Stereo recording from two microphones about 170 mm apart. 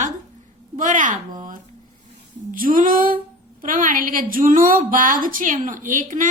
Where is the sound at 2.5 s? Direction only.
55° right (ahead or behind).